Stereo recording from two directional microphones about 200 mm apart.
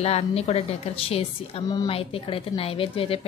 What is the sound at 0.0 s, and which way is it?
A woman's voice, 30° left (ahead or behind).